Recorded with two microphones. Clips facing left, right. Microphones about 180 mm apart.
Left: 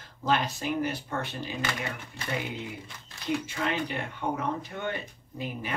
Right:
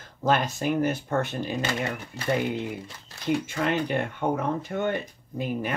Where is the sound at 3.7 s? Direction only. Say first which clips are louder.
Right 6 dB; 50° right (ahead or behind).